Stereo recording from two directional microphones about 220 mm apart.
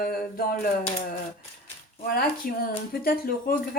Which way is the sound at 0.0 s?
45° left (ahead or behind).